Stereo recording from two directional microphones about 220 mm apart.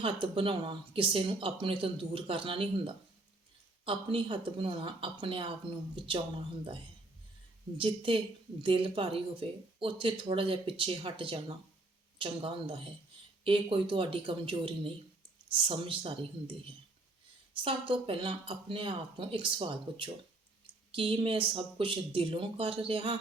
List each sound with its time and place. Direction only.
0.0 s speech: 25° right (ahead or behind)
7.8 s speech: 25° right (ahead or behind)